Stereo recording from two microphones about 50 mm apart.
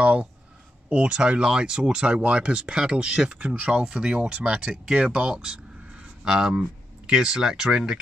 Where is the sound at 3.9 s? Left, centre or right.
Centre.